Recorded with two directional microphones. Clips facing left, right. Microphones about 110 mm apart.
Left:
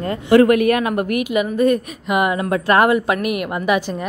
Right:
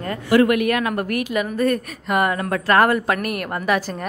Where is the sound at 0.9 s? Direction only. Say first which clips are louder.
Left 3 dB; 15° left (ahead or behind).